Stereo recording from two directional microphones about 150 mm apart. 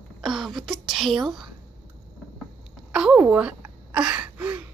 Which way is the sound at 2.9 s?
5° right (ahead or behind).